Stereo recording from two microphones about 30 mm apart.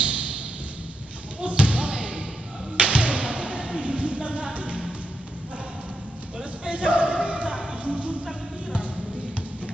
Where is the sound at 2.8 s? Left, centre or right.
Right.